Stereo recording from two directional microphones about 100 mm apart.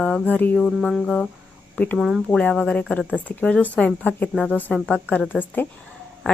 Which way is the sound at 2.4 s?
10° left (ahead or behind).